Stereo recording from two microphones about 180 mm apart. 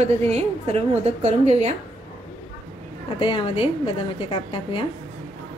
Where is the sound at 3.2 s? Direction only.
30° left (ahead or behind).